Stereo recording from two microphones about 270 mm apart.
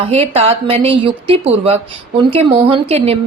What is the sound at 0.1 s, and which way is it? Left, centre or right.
A woman's voice, right.